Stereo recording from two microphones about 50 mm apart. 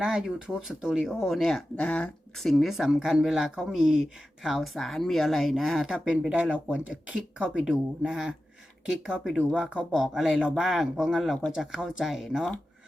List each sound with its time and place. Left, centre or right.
0.0 s speech: centre
1.0 s speech: centre
1.8 s speech: left
2.4 s speech: centre
6.1 s speech: right
7.6 s speech: centre
9.6 s speech: right; by 12.5 s centre